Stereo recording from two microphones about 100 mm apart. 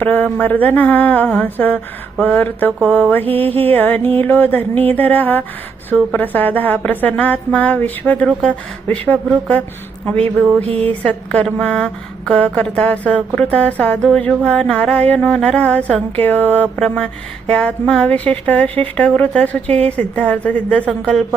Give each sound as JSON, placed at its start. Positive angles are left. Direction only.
{"t": 0.0, "sound": "speech", "side_deg": 15}
{"t": 10.6, "sound": "music", "side_deg": -75}
{"t": 11.0, "sound": "speech", "side_deg": 10}